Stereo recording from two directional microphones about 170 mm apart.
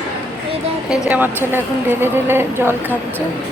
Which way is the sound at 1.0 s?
10° right (ahead or behind).